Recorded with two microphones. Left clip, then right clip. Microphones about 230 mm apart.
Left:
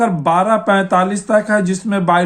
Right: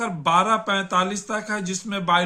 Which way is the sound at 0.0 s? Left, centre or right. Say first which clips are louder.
Left 6 dB; right.